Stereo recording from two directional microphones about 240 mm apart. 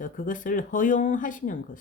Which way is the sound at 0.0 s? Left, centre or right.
Left.